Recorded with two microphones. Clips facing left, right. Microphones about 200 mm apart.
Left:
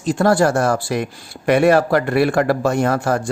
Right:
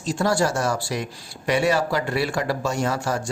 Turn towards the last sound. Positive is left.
turn(degrees=55)  # may be behind; listen again after turning